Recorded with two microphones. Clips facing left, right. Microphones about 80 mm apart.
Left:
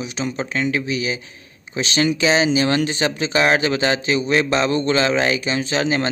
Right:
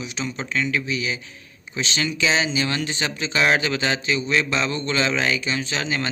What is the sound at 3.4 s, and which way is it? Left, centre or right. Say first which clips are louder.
Speech: left 3 dB; left.